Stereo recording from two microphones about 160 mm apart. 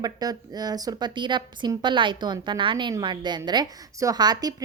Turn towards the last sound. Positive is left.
turn(degrees=-25)  # may be behind; listen again after turning